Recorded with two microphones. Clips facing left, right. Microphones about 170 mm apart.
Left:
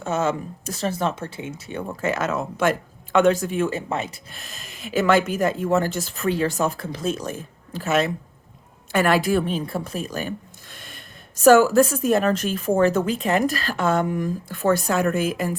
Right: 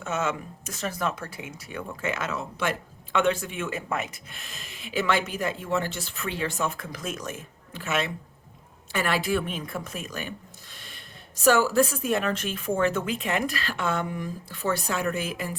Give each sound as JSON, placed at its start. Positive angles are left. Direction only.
{"t": 0.0, "sound": "speech", "side_deg": 35}
{"t": 1.9, "sound": "speech", "side_deg": 40}
{"t": 10.8, "sound": "speech", "side_deg": 50}